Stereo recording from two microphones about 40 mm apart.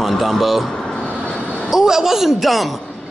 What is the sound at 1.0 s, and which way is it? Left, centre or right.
Vehicle, left.